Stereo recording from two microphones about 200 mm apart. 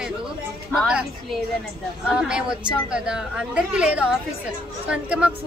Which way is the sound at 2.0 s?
5° right (ahead or behind).